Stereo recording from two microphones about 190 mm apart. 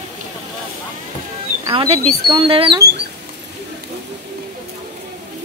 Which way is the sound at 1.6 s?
25° right (ahead or behind).